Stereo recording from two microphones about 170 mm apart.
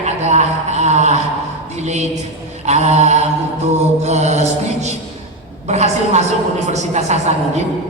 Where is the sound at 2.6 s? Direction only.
40° right (ahead or behind).